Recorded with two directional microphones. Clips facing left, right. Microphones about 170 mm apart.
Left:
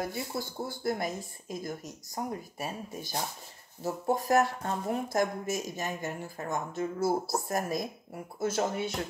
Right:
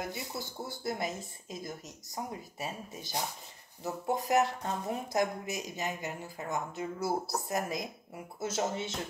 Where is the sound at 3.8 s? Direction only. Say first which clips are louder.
Left 3 dB; 20° right (ahead or behind).